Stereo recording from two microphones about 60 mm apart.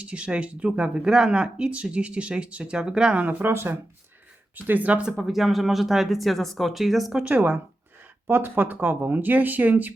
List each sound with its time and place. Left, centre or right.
0.0 s speech: centre
3.2 s speech: right
4.5 s speech: right
5.0 s speech: centre
7.1 s speech: right
8.3 s speech: right